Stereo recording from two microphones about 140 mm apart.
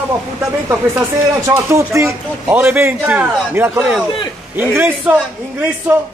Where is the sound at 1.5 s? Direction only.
20° right (ahead or behind).